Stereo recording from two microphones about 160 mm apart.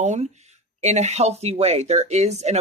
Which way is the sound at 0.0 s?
45° right (ahead or behind).